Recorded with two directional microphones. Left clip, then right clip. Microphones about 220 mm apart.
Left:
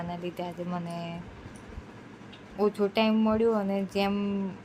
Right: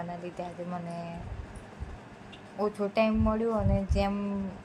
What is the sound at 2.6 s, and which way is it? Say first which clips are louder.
A woman's voice: left 2 dB; 15° left (ahead or behind).